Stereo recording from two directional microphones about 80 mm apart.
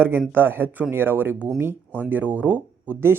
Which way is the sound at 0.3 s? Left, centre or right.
Right.